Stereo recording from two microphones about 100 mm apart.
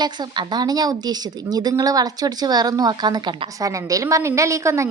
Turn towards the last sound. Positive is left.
turn(degrees=-30)  # may be behind; listen again after turning